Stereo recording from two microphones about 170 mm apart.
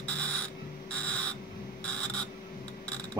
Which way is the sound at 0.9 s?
5° left (ahead or behind).